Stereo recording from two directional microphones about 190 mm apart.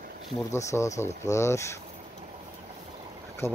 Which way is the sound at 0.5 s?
15° left (ahead or behind).